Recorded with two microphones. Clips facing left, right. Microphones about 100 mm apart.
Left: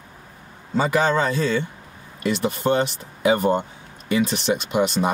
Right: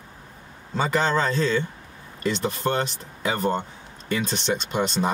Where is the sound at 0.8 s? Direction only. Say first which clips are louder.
Left 3 dB; 5° left (ahead or behind).